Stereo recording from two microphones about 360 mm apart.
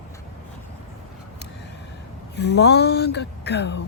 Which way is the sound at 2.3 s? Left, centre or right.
Left.